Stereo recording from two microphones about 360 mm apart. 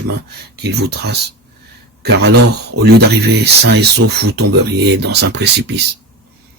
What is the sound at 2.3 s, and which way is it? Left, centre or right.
Speech, right.